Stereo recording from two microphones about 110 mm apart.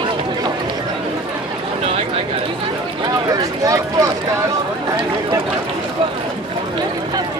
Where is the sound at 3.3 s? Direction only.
30° right (ahead or behind).